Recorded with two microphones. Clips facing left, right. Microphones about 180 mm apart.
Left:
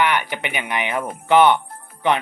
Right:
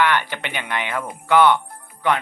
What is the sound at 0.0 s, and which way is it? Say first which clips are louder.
Speech: even; 15° left (ahead or behind).